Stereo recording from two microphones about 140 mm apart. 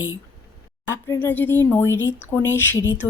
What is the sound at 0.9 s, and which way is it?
A woman's voice, 20° left (ahead or behind).